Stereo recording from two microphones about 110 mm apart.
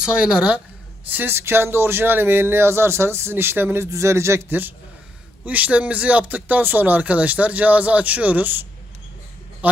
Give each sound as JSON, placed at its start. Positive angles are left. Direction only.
{"t": 0.0, "sound": "speech", "side_deg": -10}
{"t": 1.1, "sound": "speech", "side_deg": -20}